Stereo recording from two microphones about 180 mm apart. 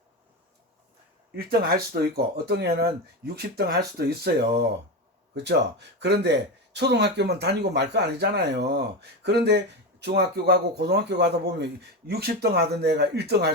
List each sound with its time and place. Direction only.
1.4 s speech: 60° right (ahead or behind)